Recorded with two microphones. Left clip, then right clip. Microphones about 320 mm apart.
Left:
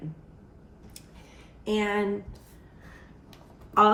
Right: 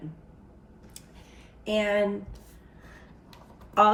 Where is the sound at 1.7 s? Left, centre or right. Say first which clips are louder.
Right 3 dB; centre.